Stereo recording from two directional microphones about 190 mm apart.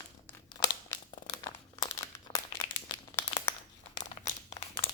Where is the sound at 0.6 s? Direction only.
20° left (ahead or behind).